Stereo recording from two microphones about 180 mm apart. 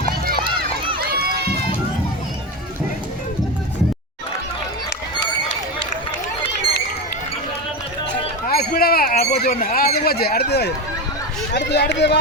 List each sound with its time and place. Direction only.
0.9 s run: 60° right (ahead or behind)
8.4 s a sound: 55° left (ahead or behind)
11.5 s speech: 70° left (ahead or behind)